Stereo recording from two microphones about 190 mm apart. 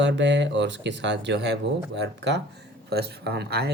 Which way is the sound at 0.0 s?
70° right (ahead or behind).